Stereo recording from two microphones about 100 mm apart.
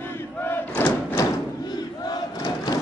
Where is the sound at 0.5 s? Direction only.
25° left (ahead or behind).